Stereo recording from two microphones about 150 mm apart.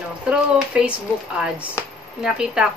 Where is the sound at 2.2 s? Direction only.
5° right (ahead or behind).